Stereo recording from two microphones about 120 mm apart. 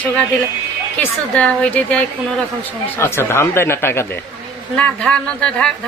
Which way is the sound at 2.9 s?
20° left (ahead or behind).